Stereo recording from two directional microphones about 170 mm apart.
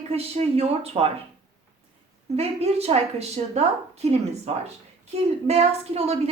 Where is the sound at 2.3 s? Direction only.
35° right (ahead or behind).